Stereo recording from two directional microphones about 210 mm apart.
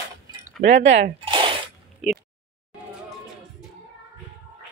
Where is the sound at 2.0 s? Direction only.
Centre (ahead or behind).